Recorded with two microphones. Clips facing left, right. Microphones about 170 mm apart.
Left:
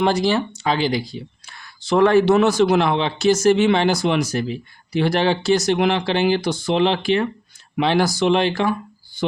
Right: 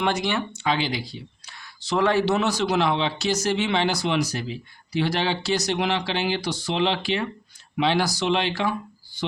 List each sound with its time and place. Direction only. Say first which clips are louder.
0.0 s speech: left 6 dB; 35° left (ahead or behind)